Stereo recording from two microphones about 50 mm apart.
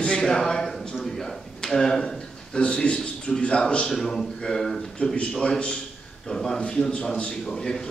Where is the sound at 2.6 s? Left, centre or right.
Left.